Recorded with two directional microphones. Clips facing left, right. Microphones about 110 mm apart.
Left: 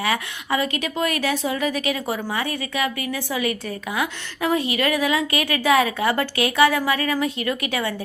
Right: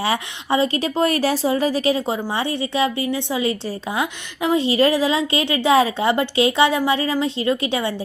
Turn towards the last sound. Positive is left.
turn(degrees=-25)  # may be behind; listen again after turning